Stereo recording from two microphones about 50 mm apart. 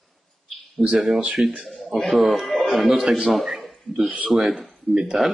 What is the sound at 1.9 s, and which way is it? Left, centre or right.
A man's voice, centre.